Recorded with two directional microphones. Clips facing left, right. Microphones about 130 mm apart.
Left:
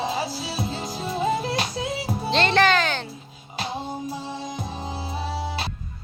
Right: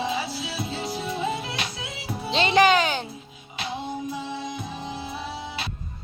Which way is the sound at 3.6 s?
40° left (ahead or behind).